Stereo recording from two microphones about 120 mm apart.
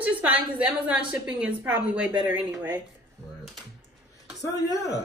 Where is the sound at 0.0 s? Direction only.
10° right (ahead or behind).